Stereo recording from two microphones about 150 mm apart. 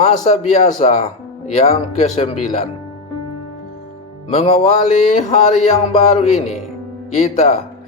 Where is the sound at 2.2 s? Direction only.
45° left (ahead or behind).